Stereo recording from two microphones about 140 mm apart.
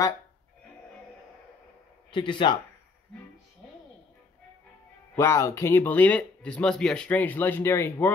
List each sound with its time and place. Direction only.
2.0 s speech: 35° left (ahead or behind)
5.1 s speech: 20° left (ahead or behind)